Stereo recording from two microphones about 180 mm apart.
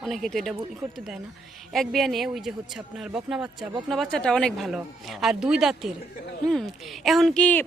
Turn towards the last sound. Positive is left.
turn(degrees=5)  # may be behind; listen again after turning